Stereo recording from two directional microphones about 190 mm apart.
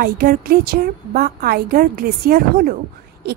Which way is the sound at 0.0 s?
50° right (ahead or behind).